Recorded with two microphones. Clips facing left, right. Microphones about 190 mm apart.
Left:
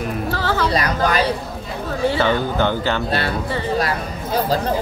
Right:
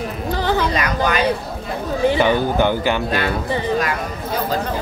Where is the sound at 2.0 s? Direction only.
15° right (ahead or behind).